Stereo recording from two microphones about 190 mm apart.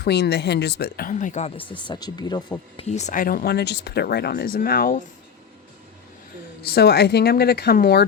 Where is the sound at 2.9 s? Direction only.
40° left (ahead or behind).